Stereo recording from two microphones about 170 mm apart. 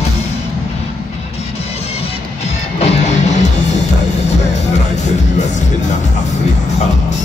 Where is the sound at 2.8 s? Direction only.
40° left (ahead or behind).